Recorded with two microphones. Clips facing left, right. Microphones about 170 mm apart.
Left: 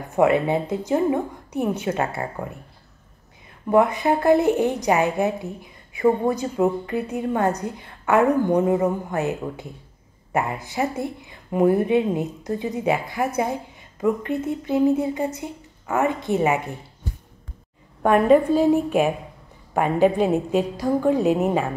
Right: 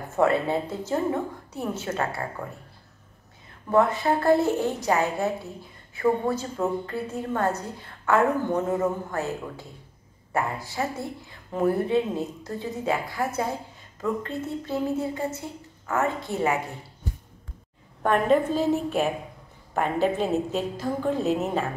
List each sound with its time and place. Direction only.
0.1 s a woman's voice: 15° left (ahead or behind)
3.7 s a woman's voice: 15° left (ahead or behind)
18.0 s a woman's voice: 10° left (ahead or behind)